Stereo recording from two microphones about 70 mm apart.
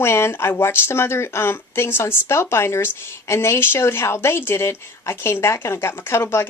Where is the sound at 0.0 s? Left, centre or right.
Left.